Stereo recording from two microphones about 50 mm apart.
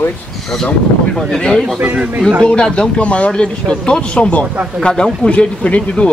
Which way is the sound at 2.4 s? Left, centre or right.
Left.